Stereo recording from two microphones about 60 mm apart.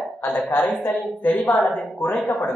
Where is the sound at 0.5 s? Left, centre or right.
Left.